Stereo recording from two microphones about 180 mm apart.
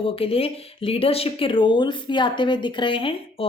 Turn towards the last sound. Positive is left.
turn(degrees=30)  # may be behind; listen again after turning